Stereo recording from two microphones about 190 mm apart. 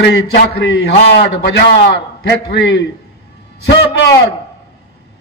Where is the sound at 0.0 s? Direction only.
55° left (ahead or behind).